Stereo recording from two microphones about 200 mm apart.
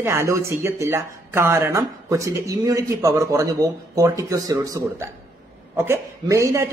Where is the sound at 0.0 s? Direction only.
15° right (ahead or behind).